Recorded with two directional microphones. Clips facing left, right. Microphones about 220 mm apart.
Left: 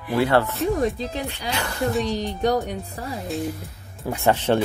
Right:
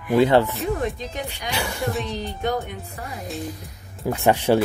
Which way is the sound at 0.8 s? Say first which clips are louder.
Left 3 dB; 35° left (ahead or behind).